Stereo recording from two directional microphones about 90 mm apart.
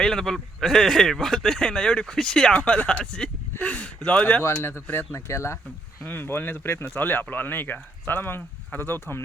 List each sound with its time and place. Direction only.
0.0 s speech: 5° left (ahead or behind); by 9.2 s 25° left (ahead or behind)